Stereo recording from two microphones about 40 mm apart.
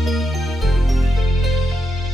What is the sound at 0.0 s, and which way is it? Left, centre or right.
Music, centre.